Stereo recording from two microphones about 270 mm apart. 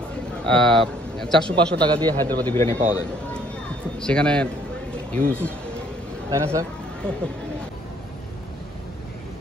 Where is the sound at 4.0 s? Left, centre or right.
Centre.